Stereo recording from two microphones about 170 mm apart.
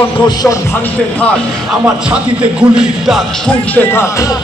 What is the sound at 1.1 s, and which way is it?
Speech, 5° left (ahead or behind).